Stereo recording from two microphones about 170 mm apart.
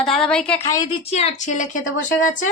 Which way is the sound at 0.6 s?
20° left (ahead or behind).